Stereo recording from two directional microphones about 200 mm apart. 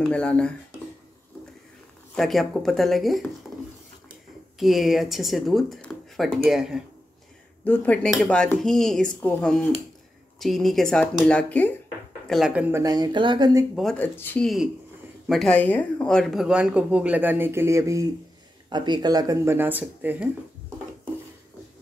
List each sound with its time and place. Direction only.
0.1 s speech: 5° left (ahead or behind)
2.1 s speech: centre (ahead or behind)
4.6 s speech: centre (ahead or behind)
7.6 s speech: 10° left (ahead or behind); by 13.7 s 20° right (ahead or behind)
13.7 s speech: 5° left (ahead or behind)